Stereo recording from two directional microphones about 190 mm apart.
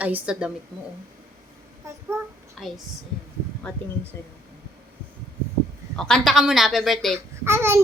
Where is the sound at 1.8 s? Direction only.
15° right (ahead or behind).